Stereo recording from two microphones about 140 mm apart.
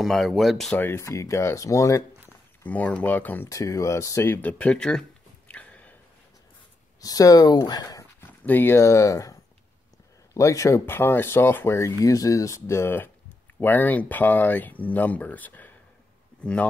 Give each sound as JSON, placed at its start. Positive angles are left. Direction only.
{"t": 0.0, "sound": "speech", "side_deg": 0}
{"t": 0.7, "sound": "speech", "side_deg": 15}
{"t": 2.6, "sound": "speech", "side_deg": 10}
{"t": 3.4, "sound": "speech", "side_deg": 25}
{"t": 5.5, "sound": "a sound", "side_deg": 10}
{"t": 7.0, "sound": "speech", "side_deg": 25}
{"t": 8.2, "sound": "speech", "side_deg": 15}